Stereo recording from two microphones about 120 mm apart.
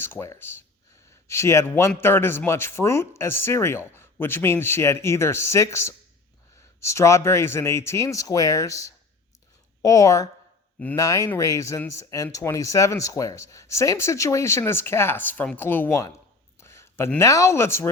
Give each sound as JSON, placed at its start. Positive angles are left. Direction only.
{"t": 0.0, "sound": "speech", "side_deg": 20}
{"t": 16.6, "sound": "a sound", "side_deg": 20}
{"t": 17.2, "sound": "speech", "side_deg": 25}